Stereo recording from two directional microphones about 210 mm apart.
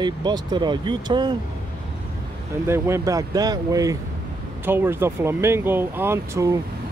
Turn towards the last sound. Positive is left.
turn(degrees=-15)  # may be behind; listen again after turning